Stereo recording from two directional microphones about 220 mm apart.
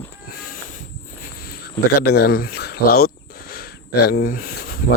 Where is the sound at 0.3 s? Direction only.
40° left (ahead or behind).